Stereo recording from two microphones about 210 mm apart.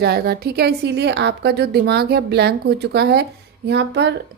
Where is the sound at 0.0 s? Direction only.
50° right (ahead or behind).